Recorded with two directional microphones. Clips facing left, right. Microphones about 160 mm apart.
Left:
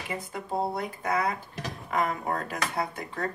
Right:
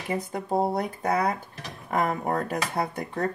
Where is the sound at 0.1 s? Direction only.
40° right (ahead or behind).